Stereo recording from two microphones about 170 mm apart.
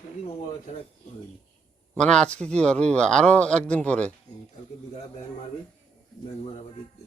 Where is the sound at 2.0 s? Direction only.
5° left (ahead or behind).